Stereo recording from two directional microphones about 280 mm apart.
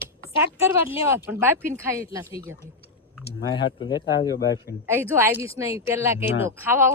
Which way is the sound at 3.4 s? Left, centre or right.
Left.